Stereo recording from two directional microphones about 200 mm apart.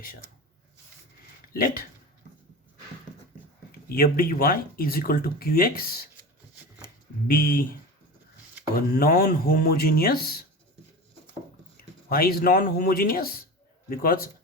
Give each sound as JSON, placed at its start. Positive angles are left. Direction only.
{"t": 1.5, "sound": "speech", "side_deg": 45}
{"t": 3.7, "sound": "speech", "side_deg": 50}
{"t": 7.3, "sound": "speech", "side_deg": 45}
{"t": 8.7, "sound": "speech", "side_deg": 50}
{"t": 11.8, "sound": "speech", "side_deg": 50}